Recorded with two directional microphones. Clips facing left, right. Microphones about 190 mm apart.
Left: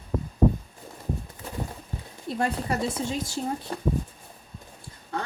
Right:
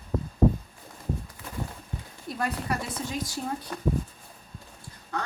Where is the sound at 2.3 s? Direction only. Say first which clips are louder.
Left 3 dB; 25° left (ahead or behind).